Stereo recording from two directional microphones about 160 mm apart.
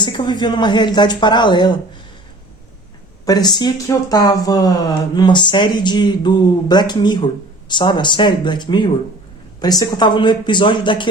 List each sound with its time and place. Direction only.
0.0 s speech: 30° left (ahead or behind)
3.2 s speech: 25° left (ahead or behind)